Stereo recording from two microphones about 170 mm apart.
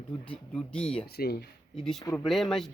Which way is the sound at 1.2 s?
65° left (ahead or behind).